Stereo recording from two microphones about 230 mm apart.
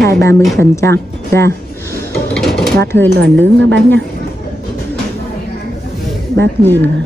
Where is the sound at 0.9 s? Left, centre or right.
Right.